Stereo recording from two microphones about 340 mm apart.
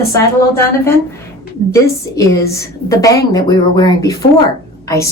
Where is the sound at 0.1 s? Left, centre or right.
Centre.